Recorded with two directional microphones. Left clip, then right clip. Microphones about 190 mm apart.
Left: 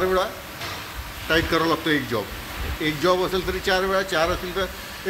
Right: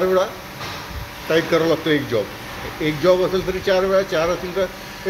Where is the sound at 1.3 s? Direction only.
15° left (ahead or behind).